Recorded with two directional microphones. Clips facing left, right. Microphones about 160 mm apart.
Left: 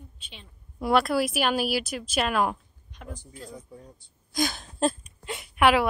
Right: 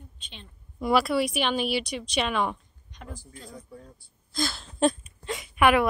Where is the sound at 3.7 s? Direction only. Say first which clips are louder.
Even; 15° left (ahead or behind).